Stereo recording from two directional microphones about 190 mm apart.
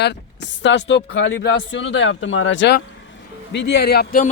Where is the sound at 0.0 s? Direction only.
65° left (ahead or behind).